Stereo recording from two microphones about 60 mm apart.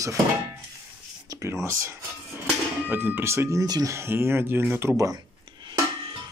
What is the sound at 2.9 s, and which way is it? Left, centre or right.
Speech, right.